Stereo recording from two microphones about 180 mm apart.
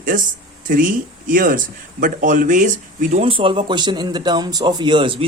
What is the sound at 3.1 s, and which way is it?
Speech, 30° right (ahead or behind).